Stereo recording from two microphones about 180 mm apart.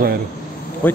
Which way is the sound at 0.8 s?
10° left (ahead or behind).